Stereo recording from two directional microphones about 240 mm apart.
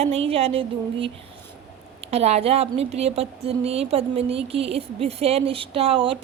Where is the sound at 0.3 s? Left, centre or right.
Right.